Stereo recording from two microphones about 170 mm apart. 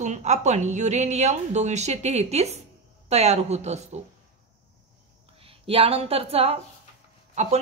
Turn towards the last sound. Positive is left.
turn(degrees=-40)  # may be behind; listen again after turning